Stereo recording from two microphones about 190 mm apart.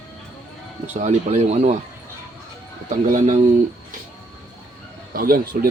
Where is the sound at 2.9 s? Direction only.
40° right (ahead or behind).